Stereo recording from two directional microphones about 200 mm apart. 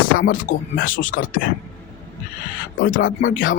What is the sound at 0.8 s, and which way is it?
Speech, 40° left (ahead or behind).